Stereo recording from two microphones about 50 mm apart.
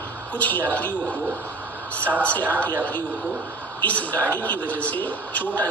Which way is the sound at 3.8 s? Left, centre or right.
Left.